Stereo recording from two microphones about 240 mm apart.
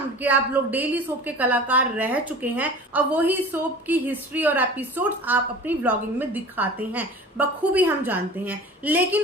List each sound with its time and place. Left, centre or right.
0.2 s a woman's voice: centre